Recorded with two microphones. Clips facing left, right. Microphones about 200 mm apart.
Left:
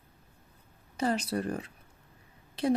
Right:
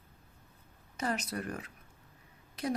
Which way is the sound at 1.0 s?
30° left (ahead or behind).